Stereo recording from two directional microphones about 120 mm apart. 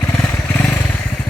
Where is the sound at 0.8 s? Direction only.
15° left (ahead or behind).